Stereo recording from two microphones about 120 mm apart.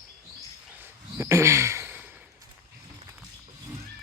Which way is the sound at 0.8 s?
20° right (ahead or behind).